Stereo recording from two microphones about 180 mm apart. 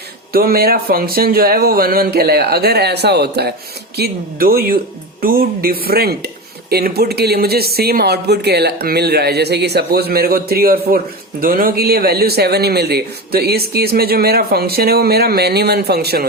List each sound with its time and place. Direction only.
0.3 s speech: 55° right (ahead or behind)